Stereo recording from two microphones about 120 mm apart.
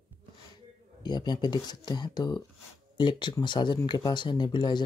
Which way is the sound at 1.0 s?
35° left (ahead or behind).